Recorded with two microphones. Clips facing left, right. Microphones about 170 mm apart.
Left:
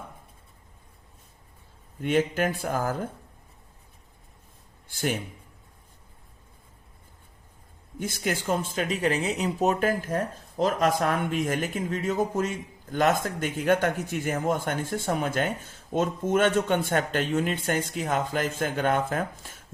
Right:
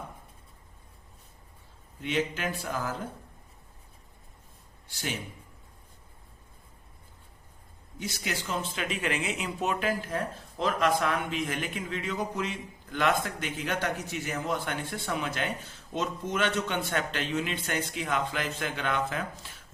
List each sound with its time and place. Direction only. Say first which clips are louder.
2.0 s speech: left 6 dB; 50° left (ahead or behind)
4.9 s speech: left 7 dB; 50° left (ahead or behind)
7.9 s speech: left 6 dB; 50° left (ahead or behind)